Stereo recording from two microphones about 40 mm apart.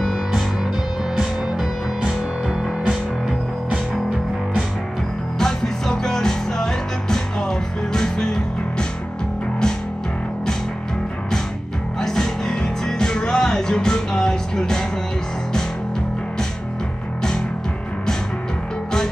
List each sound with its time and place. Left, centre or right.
0.0 s music: centre
5.4 s music: centre
12.0 s music: centre